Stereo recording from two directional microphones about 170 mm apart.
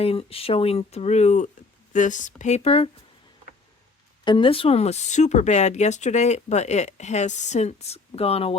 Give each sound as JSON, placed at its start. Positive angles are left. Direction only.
{"t": 0.0, "sound": "speech", "side_deg": 35}
{"t": 4.2, "sound": "speech", "side_deg": 30}